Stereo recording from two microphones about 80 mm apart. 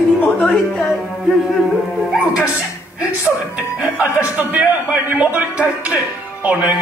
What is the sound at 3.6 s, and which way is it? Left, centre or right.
A man's voice, centre.